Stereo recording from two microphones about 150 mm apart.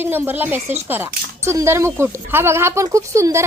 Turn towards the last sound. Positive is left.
turn(degrees=-20)  # may be behind; listen again after turning